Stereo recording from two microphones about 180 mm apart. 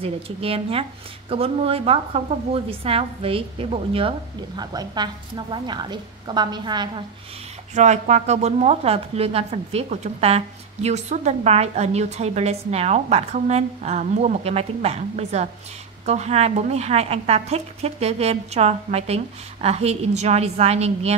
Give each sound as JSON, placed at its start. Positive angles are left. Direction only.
{"t": 0.0, "sound": "a woman's voice", "side_deg": -30}
{"t": 7.7, "sound": "a woman's voice", "side_deg": -40}